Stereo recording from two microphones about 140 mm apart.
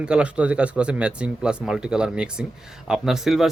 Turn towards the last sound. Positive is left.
turn(degrees=-5)  # may be behind; listen again after turning